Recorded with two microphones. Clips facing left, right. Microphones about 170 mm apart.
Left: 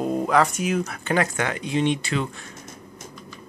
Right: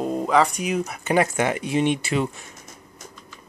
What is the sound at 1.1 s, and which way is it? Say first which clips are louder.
Speech: right 3 dB; 20° right (ahead or behind).